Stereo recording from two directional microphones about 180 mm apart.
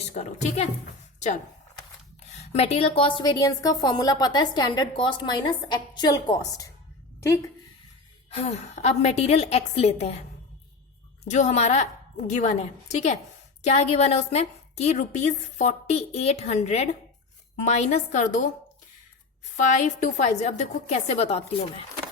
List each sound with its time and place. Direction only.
0.1 s a woman's voice: 35° left (ahead or behind)
2.3 s a woman's voice: 40° left (ahead or behind); by 6.7 s 20° left (ahead or behind)
8.3 s a woman's voice: 35° left (ahead or behind)
11.3 s a woman's voice: 40° left (ahead or behind)
19.7 s a woman's voice: 40° left (ahead or behind)